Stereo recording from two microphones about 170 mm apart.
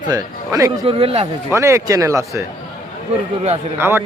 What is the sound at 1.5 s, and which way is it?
Speech, 15° right (ahead or behind).